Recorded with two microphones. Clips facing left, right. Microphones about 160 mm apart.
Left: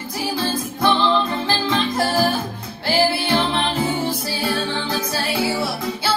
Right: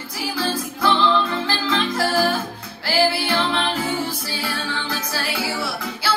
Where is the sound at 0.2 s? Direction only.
25° left (ahead or behind).